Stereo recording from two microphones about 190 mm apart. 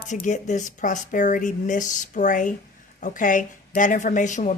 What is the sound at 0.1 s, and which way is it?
Speech, 40° left (ahead or behind).